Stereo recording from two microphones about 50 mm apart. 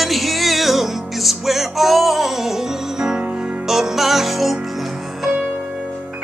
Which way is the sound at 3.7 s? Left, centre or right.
Centre.